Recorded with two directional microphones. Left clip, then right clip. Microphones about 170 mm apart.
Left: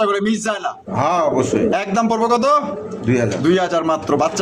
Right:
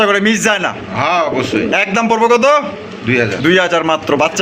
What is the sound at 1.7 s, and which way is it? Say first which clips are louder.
A man's voice: right 5 dB; 25° right (ahead or behind).